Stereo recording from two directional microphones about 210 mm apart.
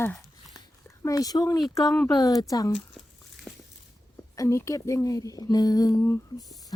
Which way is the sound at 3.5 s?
5° left (ahead or behind).